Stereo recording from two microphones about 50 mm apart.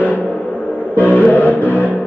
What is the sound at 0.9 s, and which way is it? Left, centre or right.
Music, left.